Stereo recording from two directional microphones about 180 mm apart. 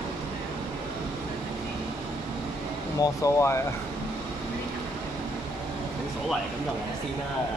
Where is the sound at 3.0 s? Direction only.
15° left (ahead or behind).